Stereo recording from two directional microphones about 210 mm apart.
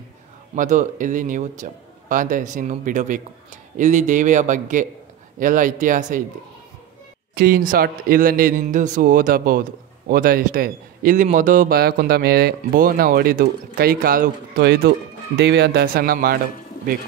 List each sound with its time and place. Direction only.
0.6 s a man's voice: 40° right (ahead or behind)
7.3 s a man's voice: 45° right (ahead or behind)
15.3 s speech: 55° right (ahead or behind)